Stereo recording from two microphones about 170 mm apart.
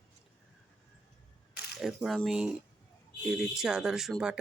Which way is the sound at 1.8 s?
Centre (ahead or behind).